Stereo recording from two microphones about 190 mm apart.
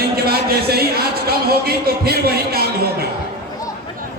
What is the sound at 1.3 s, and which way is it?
A man's voice, 55° right (ahead or behind).